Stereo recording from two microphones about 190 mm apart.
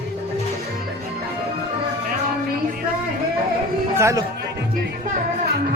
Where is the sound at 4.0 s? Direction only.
15° right (ahead or behind).